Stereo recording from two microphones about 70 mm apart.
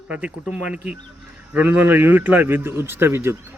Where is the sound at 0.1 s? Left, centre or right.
Centre.